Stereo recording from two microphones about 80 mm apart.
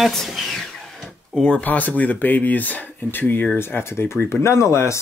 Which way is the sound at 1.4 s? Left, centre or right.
Centre.